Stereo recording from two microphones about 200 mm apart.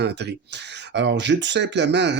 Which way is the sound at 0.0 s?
55° right (ahead or behind).